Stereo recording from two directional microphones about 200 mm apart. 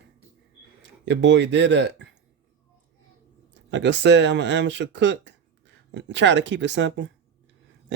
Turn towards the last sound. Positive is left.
turn(degrees=-60)  # may be behind; listen again after turning